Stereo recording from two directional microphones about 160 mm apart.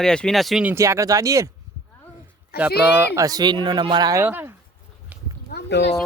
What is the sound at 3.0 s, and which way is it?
Speech, 20° right (ahead or behind).